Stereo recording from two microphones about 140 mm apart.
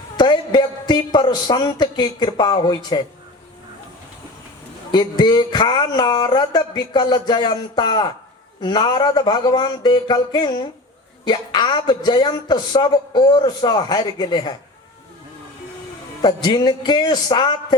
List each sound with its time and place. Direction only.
0.2 s a woman's voice: 30° left (ahead or behind)
4.9 s speech: 30° left (ahead or behind)
16.2 s speech: 30° left (ahead or behind)